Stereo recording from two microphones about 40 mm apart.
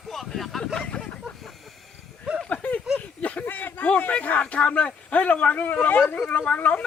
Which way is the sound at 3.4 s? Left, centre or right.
Left.